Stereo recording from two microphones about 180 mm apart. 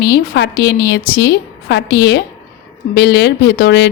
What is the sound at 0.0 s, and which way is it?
A woman's voice, 70° left (ahead or behind).